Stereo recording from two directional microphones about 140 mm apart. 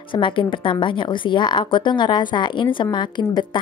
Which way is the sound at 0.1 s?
35° left (ahead or behind).